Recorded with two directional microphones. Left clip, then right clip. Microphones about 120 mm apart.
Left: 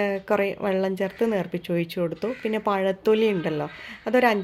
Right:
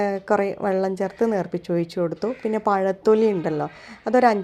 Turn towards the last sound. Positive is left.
turn(degrees=-30)  # may be behind; listen again after turning